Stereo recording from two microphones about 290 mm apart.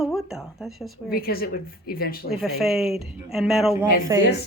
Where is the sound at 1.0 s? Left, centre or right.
Left.